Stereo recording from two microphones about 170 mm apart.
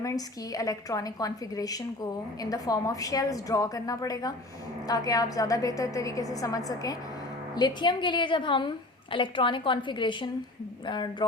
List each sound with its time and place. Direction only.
0.0 s a woman's voice: 20° left (ahead or behind)